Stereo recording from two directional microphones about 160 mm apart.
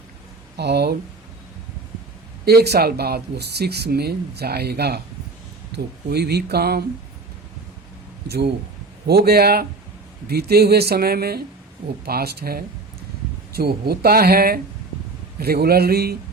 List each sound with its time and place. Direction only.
0.5 s speech: 90° right
2.4 s speech: 80° right
9.0 s speech: 80° right